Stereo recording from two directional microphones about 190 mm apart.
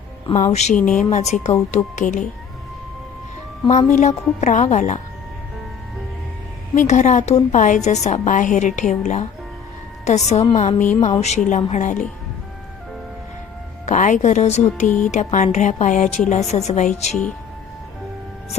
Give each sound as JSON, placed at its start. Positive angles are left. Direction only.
{"t": 0.5, "sound": "a woman's voice", "side_deg": 35}
{"t": 3.7, "sound": "a woman's voice", "side_deg": 35}
{"t": 6.7, "sound": "a woman's voice", "side_deg": 40}
{"t": 10.4, "sound": "music", "side_deg": 25}
{"t": 10.8, "sound": "a woman's voice", "side_deg": 40}
{"t": 13.8, "sound": "a woman's voice", "side_deg": 40}
{"t": 14.8, "sound": "speech", "side_deg": 5}
{"t": 15.1, "sound": "a woman's voice", "side_deg": 40}
{"t": 17.1, "sound": "speech", "side_deg": 5}